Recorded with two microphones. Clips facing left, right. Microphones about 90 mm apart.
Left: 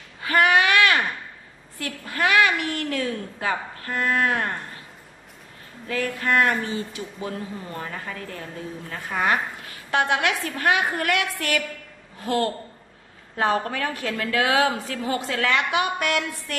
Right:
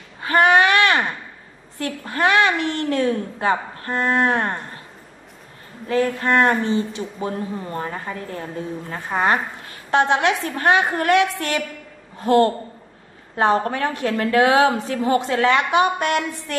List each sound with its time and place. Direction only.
0.2 s a sound: 30° right (ahead or behind)
1.8 s a woman's voice: 25° right (ahead or behind)
5.9 s a woman's voice: 30° right (ahead or behind)
7.2 s a woman's voice: 35° right (ahead or behind)
14.6 s a woman's voice: 20° right (ahead or behind)